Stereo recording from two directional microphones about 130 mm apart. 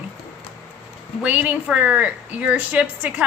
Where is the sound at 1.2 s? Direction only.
10° right (ahead or behind).